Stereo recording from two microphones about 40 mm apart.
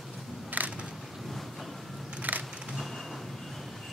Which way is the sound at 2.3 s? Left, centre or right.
Right.